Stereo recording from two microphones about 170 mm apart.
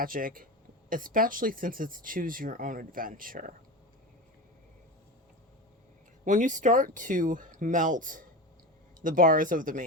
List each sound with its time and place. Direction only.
0.0 s speech: 55° right (ahead or behind)
6.2 s speech: 45° right (ahead or behind)